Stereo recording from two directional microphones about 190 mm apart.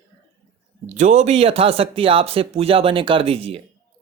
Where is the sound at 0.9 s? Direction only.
40° right (ahead or behind).